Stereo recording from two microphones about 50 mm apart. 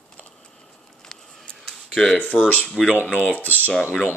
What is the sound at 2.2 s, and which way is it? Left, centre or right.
Speech, left.